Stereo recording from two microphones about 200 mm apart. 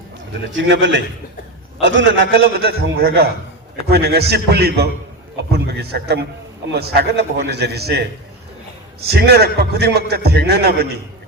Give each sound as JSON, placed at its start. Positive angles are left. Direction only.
{"t": 0.5, "sound": "a man's voice", "side_deg": -65}
{"t": 9.0, "sound": "a man's voice", "side_deg": -50}